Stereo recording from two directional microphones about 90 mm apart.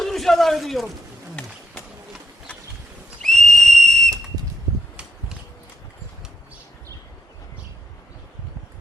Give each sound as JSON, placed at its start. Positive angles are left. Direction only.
{"t": 0.0, "sound": "speech", "side_deg": 5}
{"t": 3.2, "sound": "whistle", "side_deg": 5}